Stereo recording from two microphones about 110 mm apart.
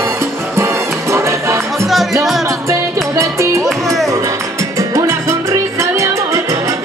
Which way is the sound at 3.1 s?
25° right (ahead or behind).